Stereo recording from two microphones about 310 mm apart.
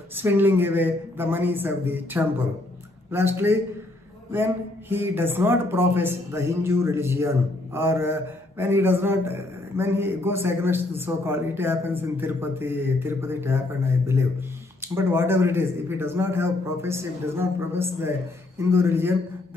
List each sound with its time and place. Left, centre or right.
0.1 s speech: centre
15.0 s speech: centre